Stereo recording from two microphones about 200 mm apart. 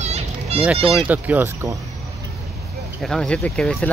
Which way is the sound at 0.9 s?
5° right (ahead or behind).